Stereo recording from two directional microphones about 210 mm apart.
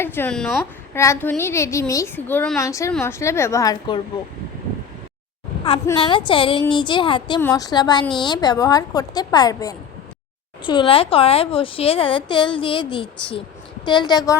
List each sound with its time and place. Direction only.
0.0 s a woman's voice: 10° left (ahead or behind)
0.9 s a woman's voice: 15° left (ahead or behind)
5.8 s speech: 20° left (ahead or behind)